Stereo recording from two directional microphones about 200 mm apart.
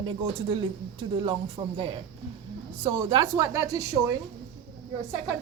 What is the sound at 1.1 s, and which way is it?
Speech, 25° right (ahead or behind).